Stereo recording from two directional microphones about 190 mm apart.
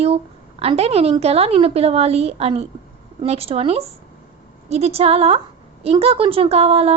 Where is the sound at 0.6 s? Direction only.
30° right (ahead or behind).